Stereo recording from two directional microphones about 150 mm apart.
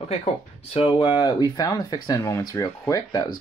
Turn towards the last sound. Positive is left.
turn(degrees=25)  # may be behind; listen again after turning